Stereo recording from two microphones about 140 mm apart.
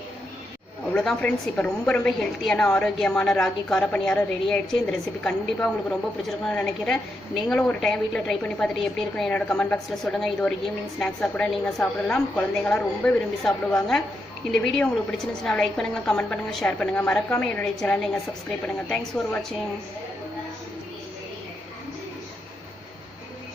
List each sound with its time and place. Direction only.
0.9 s a woman's voice: 5° left (ahead or behind)